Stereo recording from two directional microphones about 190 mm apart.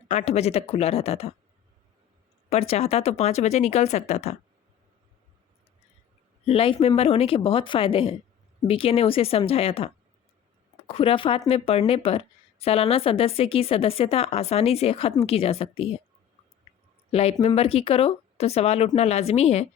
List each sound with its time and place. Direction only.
0.1 s speech: 35° left (ahead or behind)
2.5 s speech: 35° left (ahead or behind)
6.4 s speech: 30° left (ahead or behind)
17.1 s speech: 30° left (ahead or behind)